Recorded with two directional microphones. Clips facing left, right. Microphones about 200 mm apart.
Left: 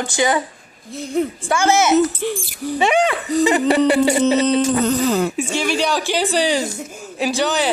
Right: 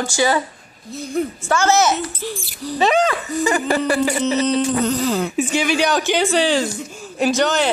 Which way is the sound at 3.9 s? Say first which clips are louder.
Left 4 dB; 25° left (ahead or behind).